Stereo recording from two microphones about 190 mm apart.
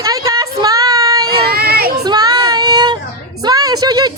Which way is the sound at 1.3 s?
55° right (ahead or behind).